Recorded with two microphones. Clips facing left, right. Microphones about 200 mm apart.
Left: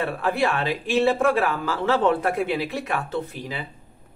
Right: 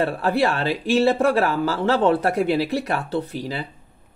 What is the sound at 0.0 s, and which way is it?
Speech, 40° right (ahead or behind).